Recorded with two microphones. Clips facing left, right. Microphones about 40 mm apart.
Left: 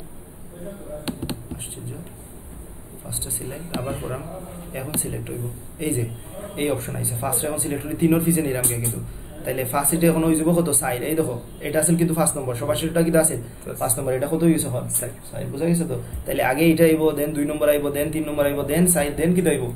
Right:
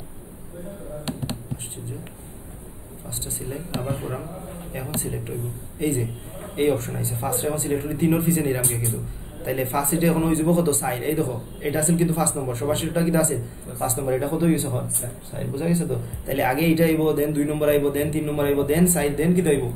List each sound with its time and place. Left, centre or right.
1.0 s a sound: centre
3.9 s a man's voice: centre
8.5 s a man's voice: centre
8.8 s speech: centre
13.7 s speech: left
14.0 s speech: centre